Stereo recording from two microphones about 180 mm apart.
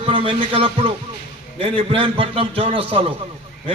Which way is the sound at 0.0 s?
30° right (ahead or behind).